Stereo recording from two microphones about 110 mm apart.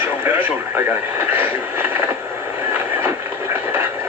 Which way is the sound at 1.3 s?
20° right (ahead or behind).